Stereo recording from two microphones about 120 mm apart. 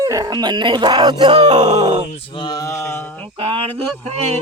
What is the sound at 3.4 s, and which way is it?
Speech, 50° right (ahead or behind).